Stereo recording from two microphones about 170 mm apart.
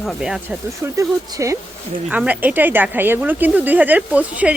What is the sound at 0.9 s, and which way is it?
A woman's voice, 20° right (ahead or behind).